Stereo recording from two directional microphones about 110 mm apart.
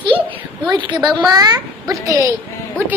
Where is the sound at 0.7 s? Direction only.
45° right (ahead or behind).